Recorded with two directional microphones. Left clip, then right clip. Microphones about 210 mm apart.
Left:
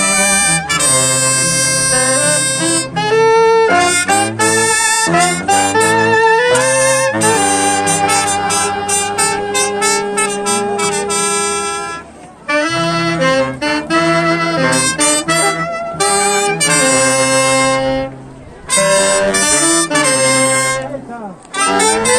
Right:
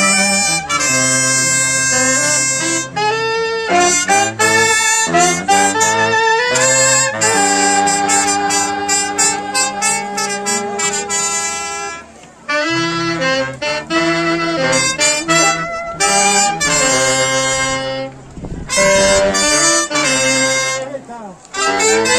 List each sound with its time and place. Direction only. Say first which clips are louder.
0.0 s music: even; 55° left (ahead or behind)
12.4 s music: left 2 dB; 55° left (ahead or behind)
15.0 s harmonica: even; 55° left (ahead or behind)
16.0 s saxophone: right 1 dB; 50° left (ahead or behind)
18.8 s harmonica: right 1 dB; 55° left (ahead or behind)
21.5 s music: left 1 dB; 45° left (ahead or behind)